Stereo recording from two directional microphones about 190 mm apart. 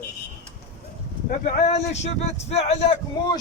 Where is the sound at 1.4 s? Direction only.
35° left (ahead or behind).